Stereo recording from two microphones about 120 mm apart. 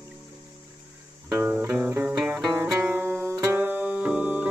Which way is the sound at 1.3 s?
20° right (ahead or behind).